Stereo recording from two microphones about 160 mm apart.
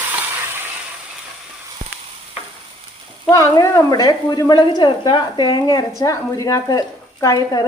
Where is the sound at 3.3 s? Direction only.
20° left (ahead or behind).